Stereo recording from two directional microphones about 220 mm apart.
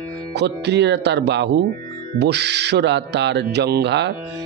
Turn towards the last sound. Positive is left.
turn(degrees=-50)  # may be behind; listen again after turning